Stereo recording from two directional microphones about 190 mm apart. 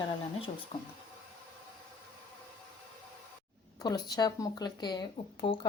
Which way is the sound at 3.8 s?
20° left (ahead or behind).